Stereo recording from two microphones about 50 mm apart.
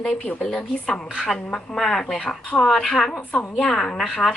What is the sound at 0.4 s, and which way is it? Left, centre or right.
A woman's voice, centre.